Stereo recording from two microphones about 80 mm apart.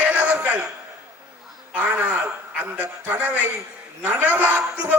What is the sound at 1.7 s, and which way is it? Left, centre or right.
A man's voice, centre.